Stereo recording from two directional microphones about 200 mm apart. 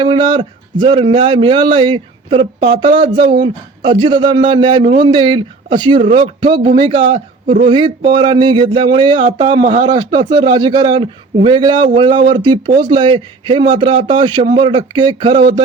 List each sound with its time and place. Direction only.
0.0 s speech: 25° right (ahead or behind)